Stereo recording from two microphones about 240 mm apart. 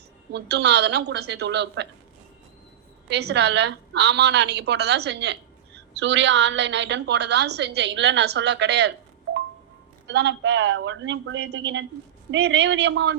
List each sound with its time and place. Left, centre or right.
0.3 s a woman's voice: right
3.1 s a woman's voice: right
10.1 s a woman's voice: right